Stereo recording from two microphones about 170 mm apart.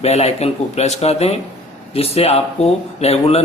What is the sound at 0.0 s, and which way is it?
Speech, 40° left (ahead or behind).